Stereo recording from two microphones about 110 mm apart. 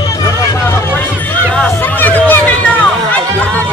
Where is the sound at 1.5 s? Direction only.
15° left (ahead or behind).